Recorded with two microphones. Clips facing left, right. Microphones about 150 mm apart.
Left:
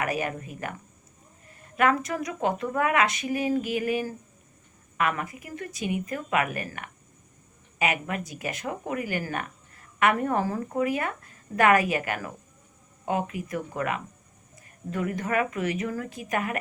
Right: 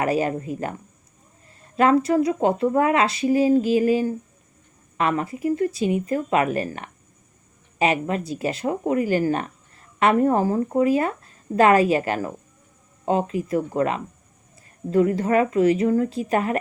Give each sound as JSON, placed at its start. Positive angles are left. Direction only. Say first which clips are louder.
{"t": 0.0, "sound": "speech", "louder": "right 7 dB", "side_deg": -30}